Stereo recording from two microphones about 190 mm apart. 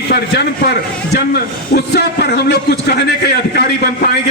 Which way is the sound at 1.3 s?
60° left (ahead or behind).